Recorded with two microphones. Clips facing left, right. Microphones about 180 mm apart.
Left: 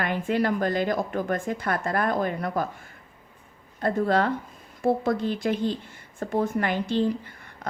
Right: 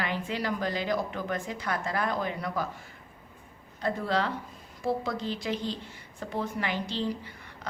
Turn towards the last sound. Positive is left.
turn(degrees=50)  # may be behind; listen again after turning